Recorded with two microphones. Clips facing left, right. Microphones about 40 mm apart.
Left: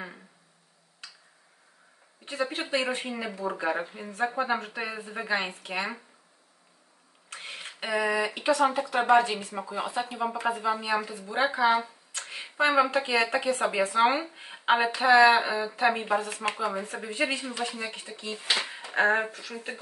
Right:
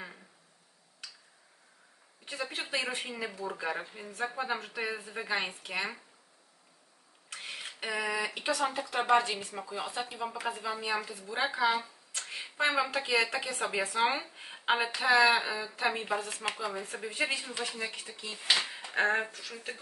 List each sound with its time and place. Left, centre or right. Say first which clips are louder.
2.2 s speech: left 6 dB; left
7.2 s a sound: left 2 dB; centre
8.6 s speech: left 3 dB; left